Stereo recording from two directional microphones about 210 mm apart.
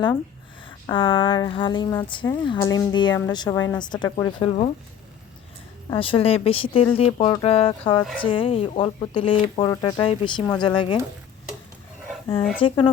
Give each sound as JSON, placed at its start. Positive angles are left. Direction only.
{"t": 0.6, "sound": "speech", "side_deg": 25}
{"t": 5.9, "sound": "speech", "side_deg": 25}
{"t": 12.6, "sound": "speech", "side_deg": 25}